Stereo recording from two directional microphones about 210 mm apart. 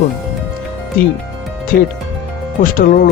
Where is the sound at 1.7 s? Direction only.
40° left (ahead or behind).